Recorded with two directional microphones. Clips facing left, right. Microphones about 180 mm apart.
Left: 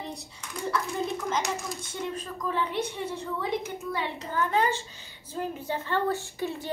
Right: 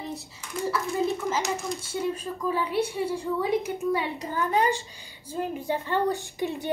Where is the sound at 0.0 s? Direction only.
5° right (ahead or behind).